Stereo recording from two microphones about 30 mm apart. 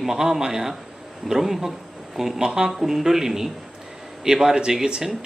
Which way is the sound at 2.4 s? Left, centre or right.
Right.